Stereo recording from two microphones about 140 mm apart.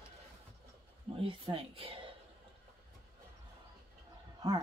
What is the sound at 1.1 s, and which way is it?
Speech, 40° right (ahead or behind).